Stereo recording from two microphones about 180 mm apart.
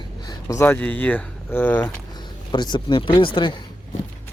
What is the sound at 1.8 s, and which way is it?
Speech, 25° left (ahead or behind).